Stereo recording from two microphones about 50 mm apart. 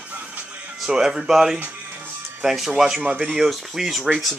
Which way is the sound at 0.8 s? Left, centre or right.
Centre.